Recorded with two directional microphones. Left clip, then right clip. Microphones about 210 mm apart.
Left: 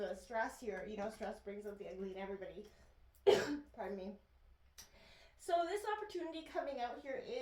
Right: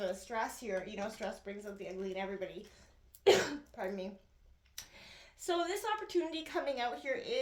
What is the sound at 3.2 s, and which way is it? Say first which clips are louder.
Speech: right 4 dB; 35° right (ahead or behind).